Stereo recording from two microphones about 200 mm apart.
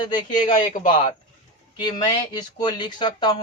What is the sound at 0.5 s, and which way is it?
Speech, 40° left (ahead or behind).